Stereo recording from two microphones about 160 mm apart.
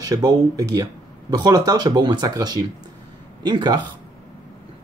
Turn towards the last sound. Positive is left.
turn(degrees=-25)  # may be behind; listen again after turning